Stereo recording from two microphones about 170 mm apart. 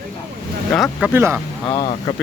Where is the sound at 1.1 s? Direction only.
15° right (ahead or behind).